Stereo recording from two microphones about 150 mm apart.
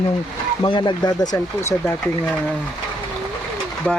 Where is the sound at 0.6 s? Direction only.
30° left (ahead or behind).